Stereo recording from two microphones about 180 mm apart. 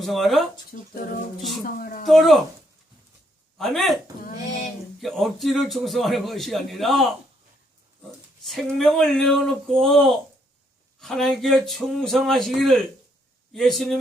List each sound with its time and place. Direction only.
0.0 s a man's voice: centre (ahead or behind)
0.7 s a woman's voice: 50° left (ahead or behind)
2.0 s a man's voice: centre (ahead or behind)
3.6 s a man's voice: centre (ahead or behind)
4.9 s a man's voice: centre (ahead or behind)
8.4 s a man's voice: centre (ahead or behind)